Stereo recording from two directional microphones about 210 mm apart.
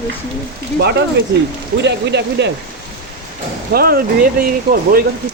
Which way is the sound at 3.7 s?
45° right (ahead or behind).